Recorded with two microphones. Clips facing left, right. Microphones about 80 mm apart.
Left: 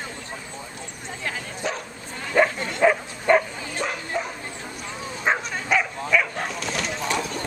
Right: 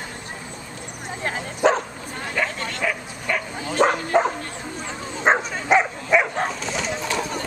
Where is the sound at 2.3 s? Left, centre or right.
Centre.